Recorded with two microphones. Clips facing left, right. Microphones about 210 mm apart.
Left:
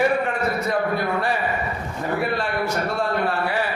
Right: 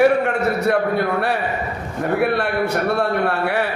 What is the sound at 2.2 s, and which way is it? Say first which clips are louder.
A man's voice: right 6 dB; 65° right (ahead or behind).